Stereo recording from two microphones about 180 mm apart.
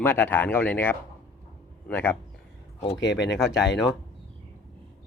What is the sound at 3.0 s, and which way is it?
Speech, 75° left (ahead or behind).